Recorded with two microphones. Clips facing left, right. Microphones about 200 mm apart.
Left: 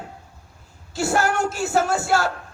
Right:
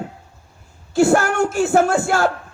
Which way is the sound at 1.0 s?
50° right (ahead or behind).